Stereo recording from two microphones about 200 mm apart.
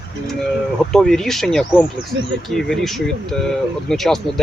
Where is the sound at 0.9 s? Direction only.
Centre (ahead or behind).